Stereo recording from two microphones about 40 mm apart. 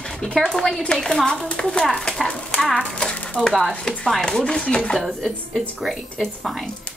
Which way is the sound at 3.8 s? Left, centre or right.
Left.